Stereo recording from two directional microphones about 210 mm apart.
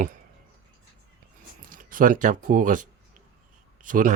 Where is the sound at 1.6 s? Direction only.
40° right (ahead or behind).